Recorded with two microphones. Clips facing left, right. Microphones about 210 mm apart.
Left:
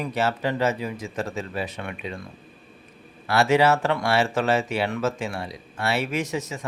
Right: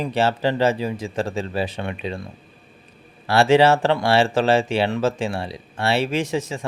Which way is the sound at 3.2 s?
30° right (ahead or behind).